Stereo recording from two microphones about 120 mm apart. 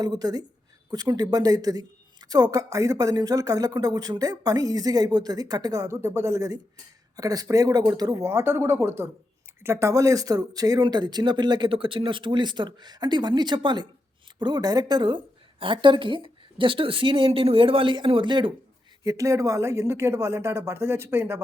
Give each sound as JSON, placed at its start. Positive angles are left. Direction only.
{"t": 0.0, "sound": "a woman's voice", "side_deg": -35}
{"t": 19.0, "sound": "speech", "side_deg": -25}